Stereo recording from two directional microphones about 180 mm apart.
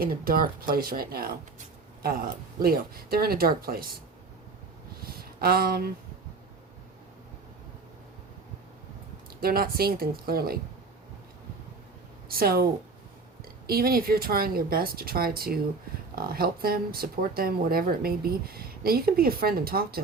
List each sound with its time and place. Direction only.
0.0 s speech: 55° right (ahead or behind)
5.0 s a sound: 55° right (ahead or behind)
9.4 s speech: 55° right (ahead or behind)
12.3 s speech: 55° right (ahead or behind)
13.7 s speech: 55° right (ahead or behind)